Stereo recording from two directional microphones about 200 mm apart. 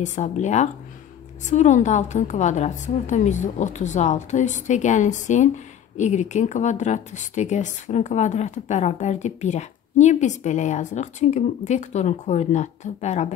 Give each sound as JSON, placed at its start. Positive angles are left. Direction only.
{"t": 0.0, "sound": "speech", "side_deg": 35}